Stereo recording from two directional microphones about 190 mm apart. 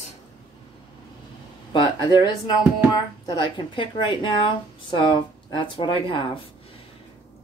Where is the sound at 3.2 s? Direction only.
25° left (ahead or behind).